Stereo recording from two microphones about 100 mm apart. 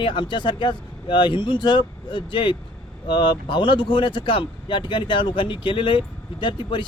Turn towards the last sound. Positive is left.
turn(degrees=50)  # may be behind; listen again after turning